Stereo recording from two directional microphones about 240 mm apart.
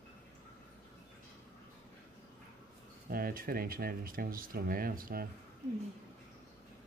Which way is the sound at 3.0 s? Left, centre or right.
Right.